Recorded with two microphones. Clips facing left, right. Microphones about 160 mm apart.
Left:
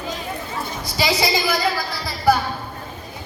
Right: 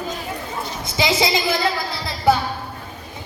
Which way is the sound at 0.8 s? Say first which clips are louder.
Right 1 dB; 20° right (ahead or behind).